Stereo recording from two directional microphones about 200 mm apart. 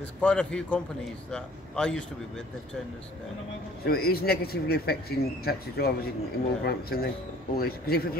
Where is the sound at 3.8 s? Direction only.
50° left (ahead or behind).